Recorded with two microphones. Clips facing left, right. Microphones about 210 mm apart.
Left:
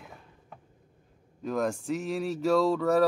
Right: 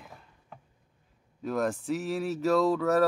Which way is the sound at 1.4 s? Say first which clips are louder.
Even; 5° right (ahead or behind).